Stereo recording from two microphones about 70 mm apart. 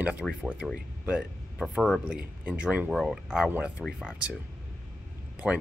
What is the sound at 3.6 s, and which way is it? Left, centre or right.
Speech, centre.